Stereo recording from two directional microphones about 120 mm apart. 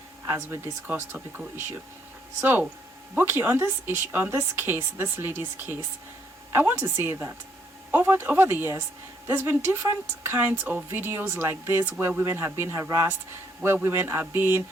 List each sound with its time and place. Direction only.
0.3 s speech: 20° right (ahead or behind)
2.4 s speech: 15° right (ahead or behind)